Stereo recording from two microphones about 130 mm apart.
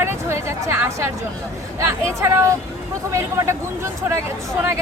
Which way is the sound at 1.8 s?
20° right (ahead or behind).